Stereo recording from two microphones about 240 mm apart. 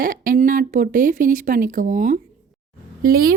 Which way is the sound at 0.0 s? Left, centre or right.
Right.